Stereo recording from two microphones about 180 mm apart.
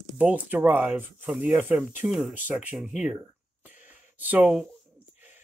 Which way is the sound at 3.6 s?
10° right (ahead or behind).